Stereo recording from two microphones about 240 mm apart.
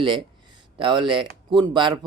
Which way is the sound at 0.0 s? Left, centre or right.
Centre.